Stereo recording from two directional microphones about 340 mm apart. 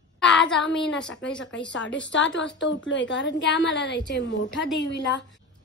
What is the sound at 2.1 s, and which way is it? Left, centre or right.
A woman's voice, left.